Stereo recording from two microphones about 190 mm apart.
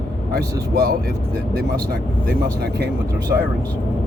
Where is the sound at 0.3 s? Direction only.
55° right (ahead or behind).